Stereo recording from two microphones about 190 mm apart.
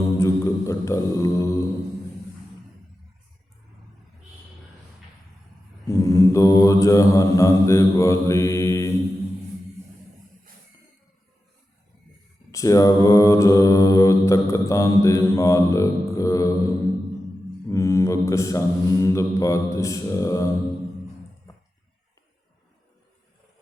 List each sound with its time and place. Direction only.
0.2 s mantra: 15° left (ahead or behind)
5.9 s mantra: 15° left (ahead or behind)
12.5 s mantra: 15° left (ahead or behind)
17.7 s mantra: 15° left (ahead or behind)